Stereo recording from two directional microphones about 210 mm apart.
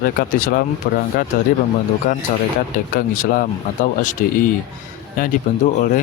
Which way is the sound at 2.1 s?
40° left (ahead or behind).